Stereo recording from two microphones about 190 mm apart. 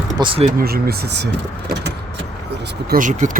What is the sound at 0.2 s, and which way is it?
Speech, 30° right (ahead or behind).